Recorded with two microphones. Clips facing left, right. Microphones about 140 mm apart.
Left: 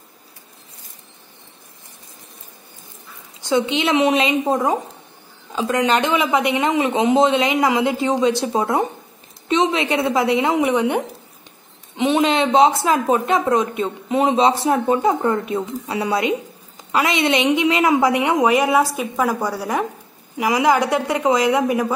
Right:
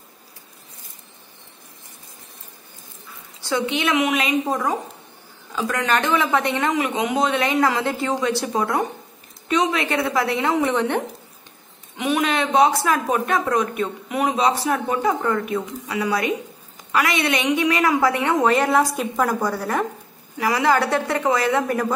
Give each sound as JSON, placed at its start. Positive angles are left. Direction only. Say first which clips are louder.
{"t": 3.3, "sound": "speech", "louder": "left 4 dB", "side_deg": 20}
{"t": 12.0, "sound": "a woman's voice", "louder": "left 4 dB", "side_deg": 25}